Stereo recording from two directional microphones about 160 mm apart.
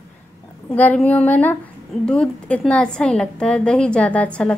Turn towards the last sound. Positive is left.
turn(degrees=5)  # may be behind; listen again after turning